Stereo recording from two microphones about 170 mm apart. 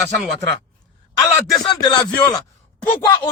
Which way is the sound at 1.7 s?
25° left (ahead or behind).